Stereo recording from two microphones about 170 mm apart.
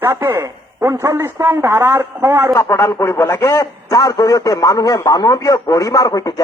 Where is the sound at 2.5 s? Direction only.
15° left (ahead or behind).